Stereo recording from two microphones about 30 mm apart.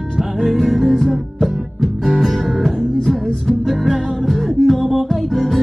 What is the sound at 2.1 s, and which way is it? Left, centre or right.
Music, centre.